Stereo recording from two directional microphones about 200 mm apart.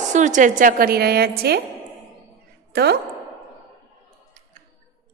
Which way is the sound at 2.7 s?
55° right (ahead or behind).